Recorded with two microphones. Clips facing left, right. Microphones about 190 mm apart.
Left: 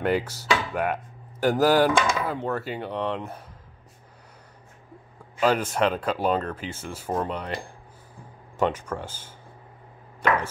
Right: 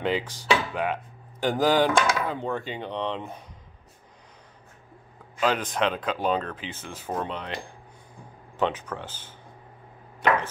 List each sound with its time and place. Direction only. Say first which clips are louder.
0.0 s speech: left 2 dB; 10° left (ahead or behind)
5.4 s speech: left 3 dB; 10° left (ahead or behind)